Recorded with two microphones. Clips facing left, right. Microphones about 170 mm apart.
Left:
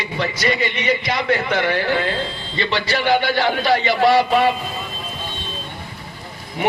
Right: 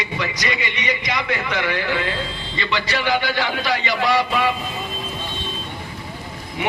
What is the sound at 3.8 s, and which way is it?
Speech, 55° left (ahead or behind).